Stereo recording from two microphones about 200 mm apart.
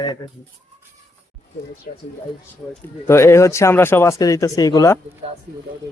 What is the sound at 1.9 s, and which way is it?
Speech, 45° left (ahead or behind).